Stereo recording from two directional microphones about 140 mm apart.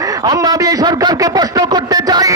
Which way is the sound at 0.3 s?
25° right (ahead or behind).